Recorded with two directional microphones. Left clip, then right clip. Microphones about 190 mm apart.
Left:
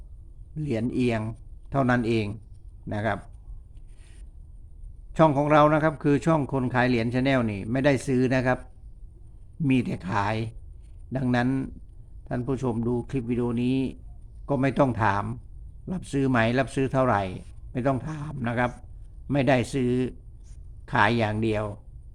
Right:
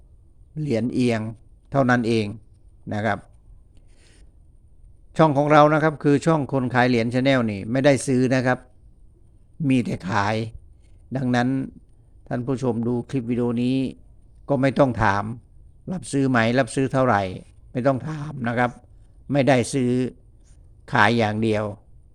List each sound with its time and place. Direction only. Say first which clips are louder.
0.5 s a man's voice: right 4 dB; 30° right (ahead or behind)
5.1 s a man's voice: right 4 dB; 30° right (ahead or behind)
9.6 s a man's voice: right 3 dB; 30° right (ahead or behind)